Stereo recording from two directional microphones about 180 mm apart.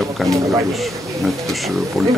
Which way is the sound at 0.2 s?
Centre (ahead or behind).